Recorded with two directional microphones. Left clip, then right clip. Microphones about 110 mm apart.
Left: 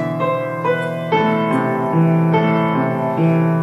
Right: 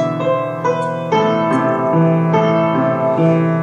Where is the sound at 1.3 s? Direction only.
15° left (ahead or behind).